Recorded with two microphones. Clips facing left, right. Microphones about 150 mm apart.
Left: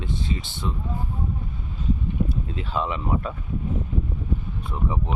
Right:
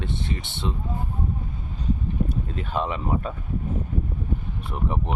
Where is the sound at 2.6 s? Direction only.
50° right (ahead or behind).